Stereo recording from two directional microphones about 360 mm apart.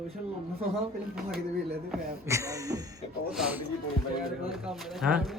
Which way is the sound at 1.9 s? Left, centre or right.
Centre.